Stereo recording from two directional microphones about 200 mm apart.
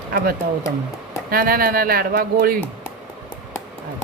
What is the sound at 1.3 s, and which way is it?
Speech, 45° right (ahead or behind).